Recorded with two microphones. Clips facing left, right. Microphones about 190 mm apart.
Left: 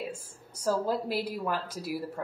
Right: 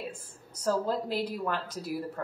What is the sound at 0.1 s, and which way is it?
A woman's voice, 10° left (ahead or behind).